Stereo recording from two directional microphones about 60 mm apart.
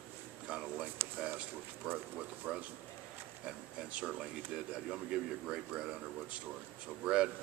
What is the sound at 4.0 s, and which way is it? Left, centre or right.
A man's voice, right.